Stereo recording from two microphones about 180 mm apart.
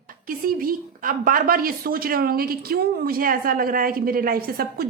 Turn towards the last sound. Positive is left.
turn(degrees=-55)  # may be behind; listen again after turning